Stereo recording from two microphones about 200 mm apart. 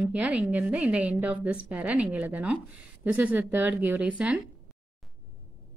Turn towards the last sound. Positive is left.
turn(degrees=-5)  # may be behind; listen again after turning